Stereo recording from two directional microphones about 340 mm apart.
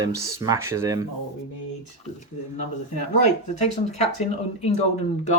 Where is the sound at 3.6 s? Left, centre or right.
Centre.